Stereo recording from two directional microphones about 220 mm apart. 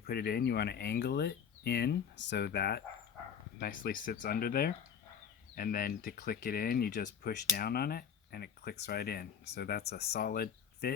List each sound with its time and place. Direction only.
0.0 s speech: 45° left (ahead or behind)